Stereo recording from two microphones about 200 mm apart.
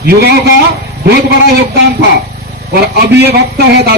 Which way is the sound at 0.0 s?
50° right (ahead or behind).